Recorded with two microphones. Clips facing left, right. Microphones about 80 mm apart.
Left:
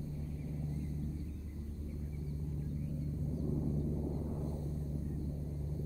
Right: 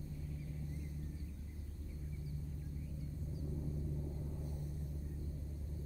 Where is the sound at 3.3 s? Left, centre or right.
Left.